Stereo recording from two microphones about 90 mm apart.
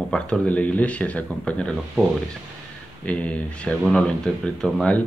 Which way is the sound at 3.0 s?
15° left (ahead or behind).